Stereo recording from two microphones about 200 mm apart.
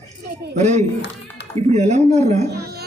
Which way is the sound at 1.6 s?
30° right (ahead or behind).